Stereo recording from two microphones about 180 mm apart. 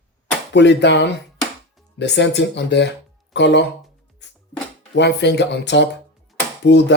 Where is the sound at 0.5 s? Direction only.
80° left.